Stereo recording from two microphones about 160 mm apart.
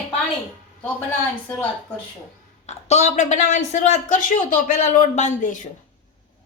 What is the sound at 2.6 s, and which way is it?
Speech, 45° left (ahead or behind).